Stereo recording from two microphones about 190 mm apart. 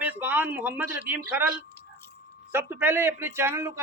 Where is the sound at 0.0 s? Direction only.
10° right (ahead or behind).